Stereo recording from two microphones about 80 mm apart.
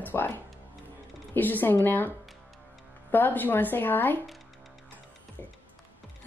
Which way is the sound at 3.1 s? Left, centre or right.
Left.